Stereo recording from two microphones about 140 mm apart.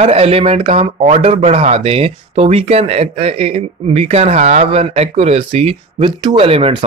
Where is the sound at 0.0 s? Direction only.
45° right (ahead or behind).